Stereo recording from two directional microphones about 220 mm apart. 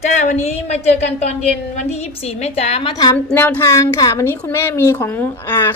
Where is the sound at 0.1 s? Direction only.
30° left (ahead or behind).